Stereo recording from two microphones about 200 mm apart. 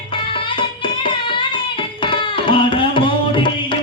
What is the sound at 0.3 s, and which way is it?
Music, 25° left (ahead or behind).